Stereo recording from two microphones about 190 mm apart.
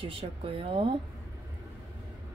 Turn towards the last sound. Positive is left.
turn(degrees=-30)  # may be behind; listen again after turning